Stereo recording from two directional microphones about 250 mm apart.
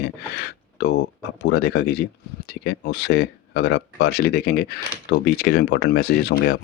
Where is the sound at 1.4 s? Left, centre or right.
Left.